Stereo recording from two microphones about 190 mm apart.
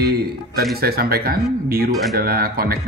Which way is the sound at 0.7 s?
55° right (ahead or behind).